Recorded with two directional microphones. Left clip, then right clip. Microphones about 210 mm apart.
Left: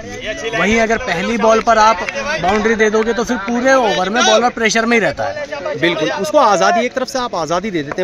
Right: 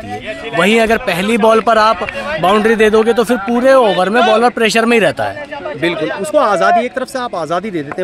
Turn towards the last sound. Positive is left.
turn(degrees=5)  # may be behind; listen again after turning